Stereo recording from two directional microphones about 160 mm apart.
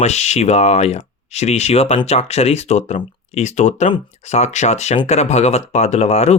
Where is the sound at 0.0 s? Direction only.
45° left (ahead or behind).